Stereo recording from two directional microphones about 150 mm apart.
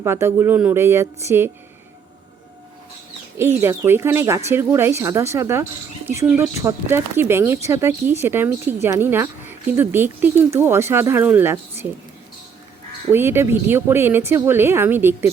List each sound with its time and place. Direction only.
0.0 s speech: 15° right (ahead or behind)
3.3 s speech: 15° right (ahead or behind)
13.1 s speech: 15° right (ahead or behind)